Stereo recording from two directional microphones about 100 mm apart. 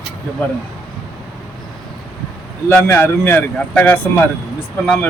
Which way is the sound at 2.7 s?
20° left (ahead or behind).